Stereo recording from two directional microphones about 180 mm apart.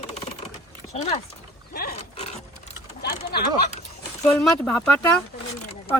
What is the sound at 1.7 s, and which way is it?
Roaring cats, 60° left (ahead or behind).